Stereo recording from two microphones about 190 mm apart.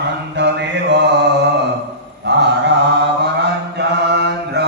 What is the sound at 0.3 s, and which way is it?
Mantra, 65° right (ahead or behind).